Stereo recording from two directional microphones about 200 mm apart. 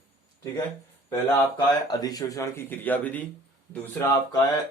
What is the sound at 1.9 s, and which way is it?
Speech, 20° left (ahead or behind).